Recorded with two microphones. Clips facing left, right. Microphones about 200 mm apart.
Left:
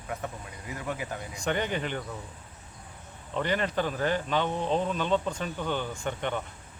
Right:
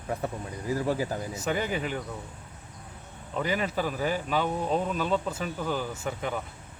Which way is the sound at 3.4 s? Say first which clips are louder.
Even; 5° right (ahead or behind).